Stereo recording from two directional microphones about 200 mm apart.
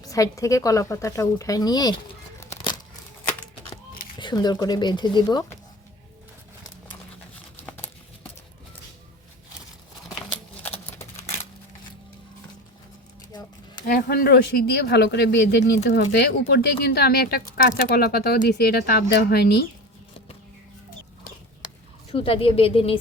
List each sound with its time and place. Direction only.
0.0 s speech: 15° left (ahead or behind)
2.5 s crumpling: 25° left (ahead or behind)
4.2 s speech: 20° left (ahead or behind)
13.8 s speech: 50° left (ahead or behind)
22.1 s speech: 25° left (ahead or behind)